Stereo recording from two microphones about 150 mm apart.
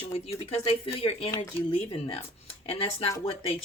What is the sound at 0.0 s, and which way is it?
Speech, 45° left (ahead or behind).